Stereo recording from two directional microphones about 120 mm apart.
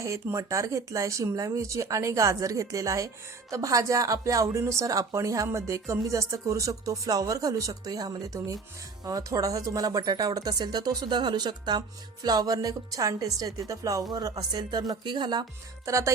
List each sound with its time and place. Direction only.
0.0 s a woman's voice: 25° right (ahead or behind)
15.9 s a woman's voice: 25° right (ahead or behind)